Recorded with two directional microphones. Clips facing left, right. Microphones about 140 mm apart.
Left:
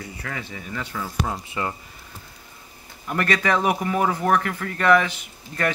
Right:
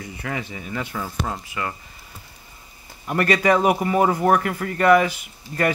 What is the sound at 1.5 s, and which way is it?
Speech, 25° left (ahead or behind).